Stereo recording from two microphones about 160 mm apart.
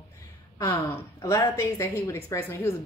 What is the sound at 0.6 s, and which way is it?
A woman's voice, 20° left (ahead or behind).